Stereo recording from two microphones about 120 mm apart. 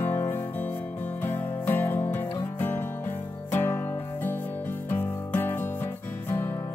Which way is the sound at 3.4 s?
15° left (ahead or behind).